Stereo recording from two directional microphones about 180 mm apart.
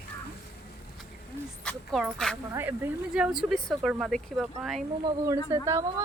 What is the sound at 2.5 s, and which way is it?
Speech, 10° right (ahead or behind).